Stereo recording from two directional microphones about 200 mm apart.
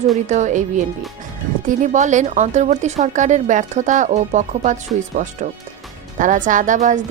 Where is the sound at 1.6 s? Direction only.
40° right (ahead or behind).